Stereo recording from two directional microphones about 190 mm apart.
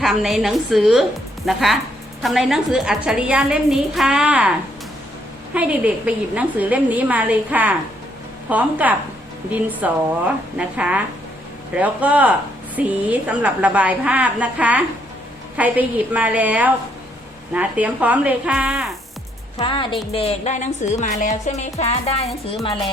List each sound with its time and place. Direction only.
0.0 s a woman's voice: centre (ahead or behind)
5.5 s a woman's voice: 5° right (ahead or behind)
19.5 s a woman's voice: 25° left (ahead or behind)
20.1 s music: 35° left (ahead or behind)